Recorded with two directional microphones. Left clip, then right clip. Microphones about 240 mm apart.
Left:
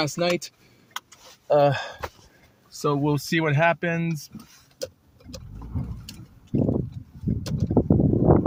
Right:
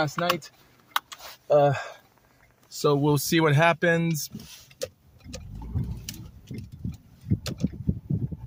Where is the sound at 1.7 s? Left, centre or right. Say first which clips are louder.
Left 2 dB; centre.